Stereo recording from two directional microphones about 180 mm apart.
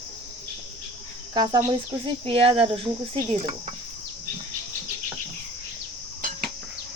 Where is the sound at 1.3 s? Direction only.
20° right (ahead or behind).